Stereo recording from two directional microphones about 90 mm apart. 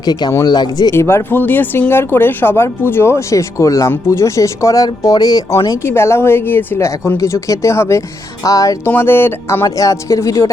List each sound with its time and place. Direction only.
0.0 s speech: 50° left (ahead or behind)
0.9 s speech: 30° left (ahead or behind); by 5.4 s 45° left (ahead or behind)
5.8 s speech: 30° left (ahead or behind)
8.9 s speech: 25° left (ahead or behind)
9.6 s speech: 35° left (ahead or behind)